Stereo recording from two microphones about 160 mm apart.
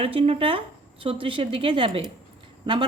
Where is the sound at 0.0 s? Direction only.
35° right (ahead or behind).